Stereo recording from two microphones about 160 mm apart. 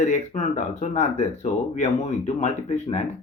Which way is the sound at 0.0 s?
50° left (ahead or behind).